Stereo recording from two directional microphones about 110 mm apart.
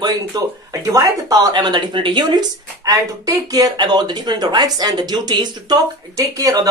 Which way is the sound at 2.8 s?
35° right (ahead or behind).